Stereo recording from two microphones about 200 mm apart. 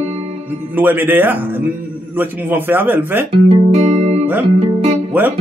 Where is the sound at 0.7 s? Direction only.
10° right (ahead or behind).